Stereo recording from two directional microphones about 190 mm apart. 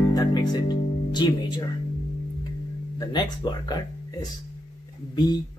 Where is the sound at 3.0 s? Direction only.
25° left (ahead or behind).